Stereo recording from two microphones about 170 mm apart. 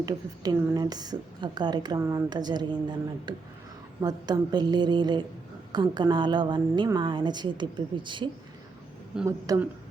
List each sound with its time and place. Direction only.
0.0 s speech: 20° right (ahead or behind)
9.2 s speech: 15° right (ahead or behind)